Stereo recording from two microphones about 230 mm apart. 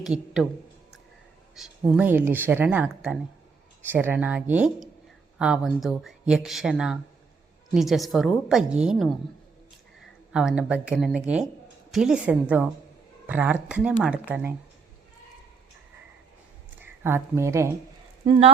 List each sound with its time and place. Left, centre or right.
0.0 s speech: centre
1.5 s speech: centre
10.3 s speech: centre
16.8 s speech: centre
18.3 s speech: right